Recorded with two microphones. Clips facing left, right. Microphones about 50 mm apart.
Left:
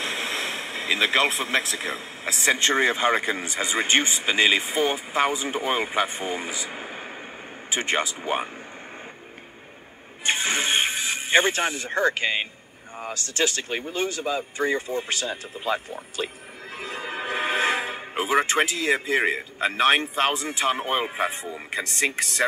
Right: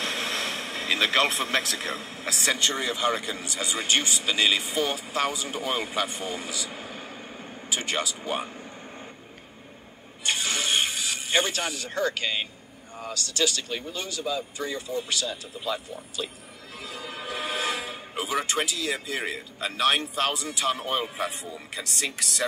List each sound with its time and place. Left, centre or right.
0.0 s a sound: centre
2.6 s speech: left
10.2 s music: left
12.9 s speech: left